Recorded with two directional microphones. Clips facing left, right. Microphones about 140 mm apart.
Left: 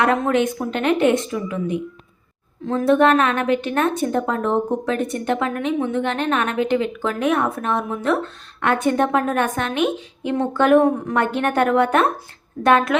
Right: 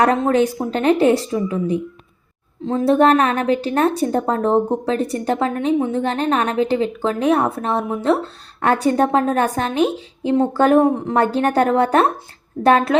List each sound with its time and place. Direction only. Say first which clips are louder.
0.0 s a woman's voice: right 3 dB; 35° right (ahead or behind)